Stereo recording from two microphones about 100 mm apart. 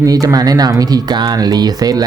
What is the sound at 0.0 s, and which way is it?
Speech, 35° right (ahead or behind).